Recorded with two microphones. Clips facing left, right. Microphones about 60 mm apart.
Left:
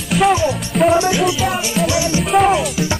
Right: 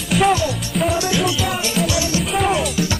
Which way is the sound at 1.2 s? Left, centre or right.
Centre.